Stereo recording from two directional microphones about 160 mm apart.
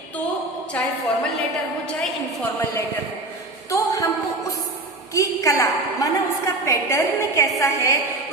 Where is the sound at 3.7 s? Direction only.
20° left (ahead or behind).